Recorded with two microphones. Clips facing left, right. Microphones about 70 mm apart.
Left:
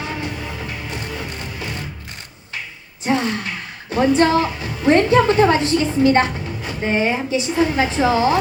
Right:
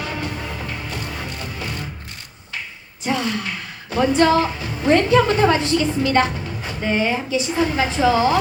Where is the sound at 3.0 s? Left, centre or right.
Left.